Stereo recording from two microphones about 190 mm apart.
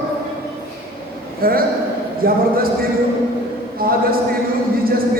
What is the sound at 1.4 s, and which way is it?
A man's voice, 50° right (ahead or behind).